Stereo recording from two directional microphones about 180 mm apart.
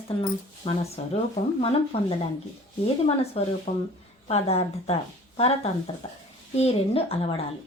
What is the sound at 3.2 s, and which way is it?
Speech, 35° left (ahead or behind).